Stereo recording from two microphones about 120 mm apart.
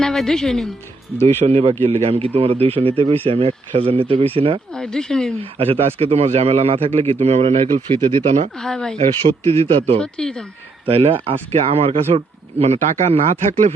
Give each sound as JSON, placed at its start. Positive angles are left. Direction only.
{"t": 0.0, "sound": "a woman's voice", "side_deg": 5}
{"t": 1.2, "sound": "a man's voice", "side_deg": -55}
{"t": 4.7, "sound": "a woman's voice", "side_deg": 5}
{"t": 5.4, "sound": "speech", "side_deg": -50}
{"t": 8.5, "sound": "a woman's voice", "side_deg": 5}
{"t": 9.5, "sound": "speech", "side_deg": -55}
{"t": 10.0, "sound": "speech", "side_deg": 5}
{"t": 10.8, "sound": "a man's voice", "side_deg": -50}